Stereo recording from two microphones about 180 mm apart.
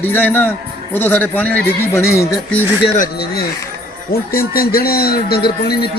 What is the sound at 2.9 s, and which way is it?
Speech, 55° left (ahead or behind).